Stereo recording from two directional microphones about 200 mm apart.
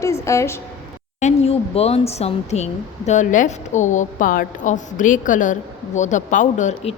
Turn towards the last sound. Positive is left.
turn(degrees=35)  # may be behind; listen again after turning